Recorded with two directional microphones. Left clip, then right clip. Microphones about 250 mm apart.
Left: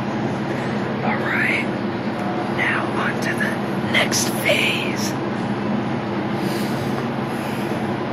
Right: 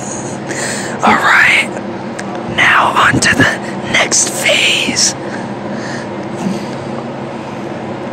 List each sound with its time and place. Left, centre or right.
1.0 s whispering: right